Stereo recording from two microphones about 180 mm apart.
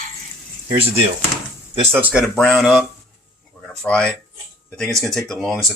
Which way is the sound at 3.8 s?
5° left (ahead or behind).